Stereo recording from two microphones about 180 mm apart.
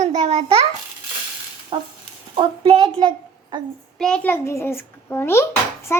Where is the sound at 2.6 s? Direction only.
30° right (ahead or behind).